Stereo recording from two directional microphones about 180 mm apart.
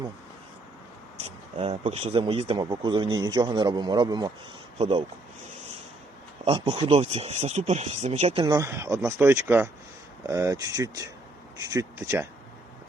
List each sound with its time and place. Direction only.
1.5 s speech: 35° right (ahead or behind)
6.4 s speech: 30° right (ahead or behind)